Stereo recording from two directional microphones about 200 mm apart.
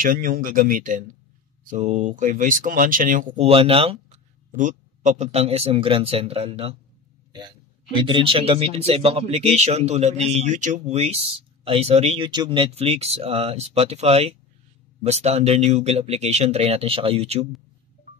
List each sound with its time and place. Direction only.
0.0 s speech: 45° right (ahead or behind)